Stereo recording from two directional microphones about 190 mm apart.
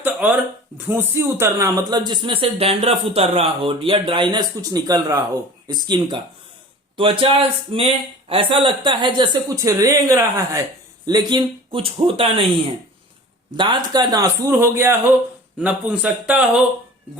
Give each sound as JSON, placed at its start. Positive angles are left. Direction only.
{"t": 0.0, "sound": "a sound", "side_deg": -10}
{"t": 0.9, "sound": "speech", "side_deg": -10}
{"t": 13.6, "sound": "a man's voice", "side_deg": -25}